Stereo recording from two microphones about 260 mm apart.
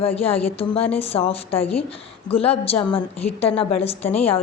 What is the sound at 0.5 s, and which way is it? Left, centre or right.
Speech, left.